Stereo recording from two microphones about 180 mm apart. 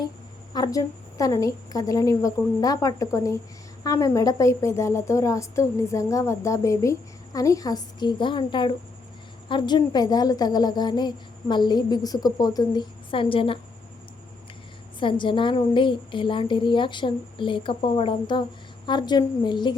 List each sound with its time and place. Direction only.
0.5 s a woman's voice: 20° left (ahead or behind)
14.9 s a woman's voice: 25° left (ahead or behind)